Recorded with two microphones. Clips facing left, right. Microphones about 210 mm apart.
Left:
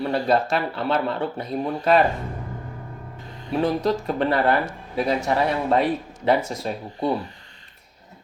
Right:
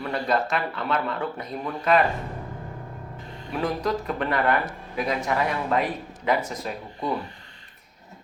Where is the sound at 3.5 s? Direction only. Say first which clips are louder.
Left 4 dB; 30° left (ahead or behind).